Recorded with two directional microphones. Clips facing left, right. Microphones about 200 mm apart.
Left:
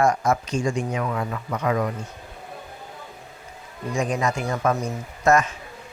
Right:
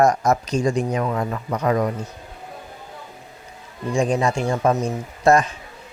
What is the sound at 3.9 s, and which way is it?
Speech, 30° right (ahead or behind).